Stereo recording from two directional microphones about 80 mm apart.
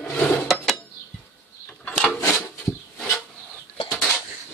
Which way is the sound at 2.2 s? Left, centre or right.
Left.